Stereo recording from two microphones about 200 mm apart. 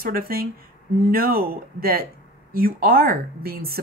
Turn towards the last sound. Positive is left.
turn(degrees=-50)  # may be behind; listen again after turning